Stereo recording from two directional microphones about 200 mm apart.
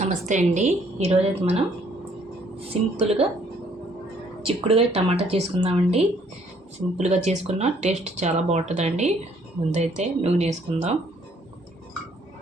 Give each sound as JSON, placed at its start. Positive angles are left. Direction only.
{"t": 0.0, "sound": "speech", "side_deg": -40}
{"t": 4.4, "sound": "speech", "side_deg": -30}